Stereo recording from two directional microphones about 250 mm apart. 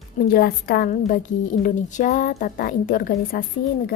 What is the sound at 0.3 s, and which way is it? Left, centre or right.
A woman's voice, left.